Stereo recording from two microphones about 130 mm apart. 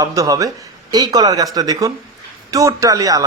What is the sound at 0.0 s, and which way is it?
Speech, 25° right (ahead or behind).